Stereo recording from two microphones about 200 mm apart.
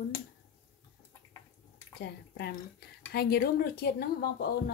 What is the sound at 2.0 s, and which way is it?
Speech, 55° left (ahead or behind).